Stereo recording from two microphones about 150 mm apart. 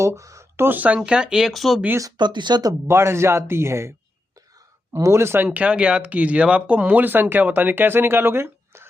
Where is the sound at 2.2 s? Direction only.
30° right (ahead or behind).